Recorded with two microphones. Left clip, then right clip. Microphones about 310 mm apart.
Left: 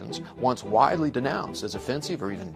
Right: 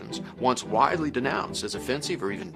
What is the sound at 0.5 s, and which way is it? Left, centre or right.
Speech, left.